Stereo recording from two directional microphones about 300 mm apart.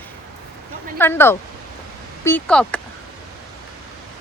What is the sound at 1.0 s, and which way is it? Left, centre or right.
A woman's voice, centre.